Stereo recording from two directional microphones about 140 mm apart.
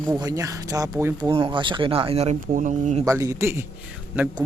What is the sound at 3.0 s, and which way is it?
Speech, 25° right (ahead or behind).